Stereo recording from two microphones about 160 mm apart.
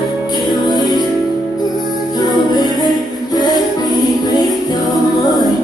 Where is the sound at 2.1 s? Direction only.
25° left (ahead or behind).